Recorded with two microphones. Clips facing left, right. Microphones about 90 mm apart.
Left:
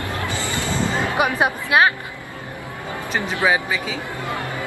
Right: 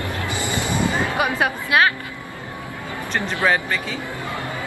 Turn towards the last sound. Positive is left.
turn(degrees=10)  # may be behind; listen again after turning